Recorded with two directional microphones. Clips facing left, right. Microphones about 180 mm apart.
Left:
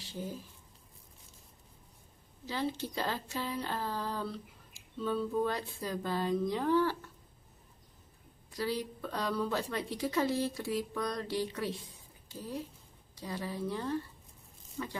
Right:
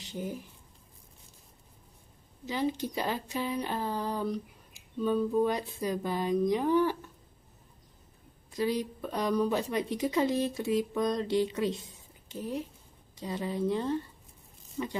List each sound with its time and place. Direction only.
0.0 s speech: 20° right (ahead or behind)
2.4 s a woman's voice: 15° right (ahead or behind)
8.5 s a woman's voice: 20° right (ahead or behind)